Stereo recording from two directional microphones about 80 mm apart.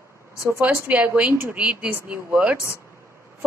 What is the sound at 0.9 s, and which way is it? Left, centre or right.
Speech, centre.